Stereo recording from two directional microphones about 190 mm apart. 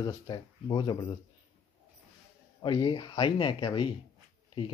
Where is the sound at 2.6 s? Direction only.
25° left (ahead or behind).